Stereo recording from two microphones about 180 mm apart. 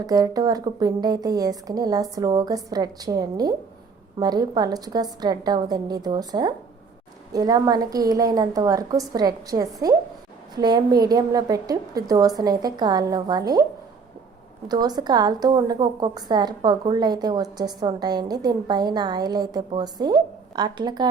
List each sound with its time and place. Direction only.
0.0 s a woman's voice: 20° right (ahead or behind)
14.7 s a woman's voice: 20° right (ahead or behind)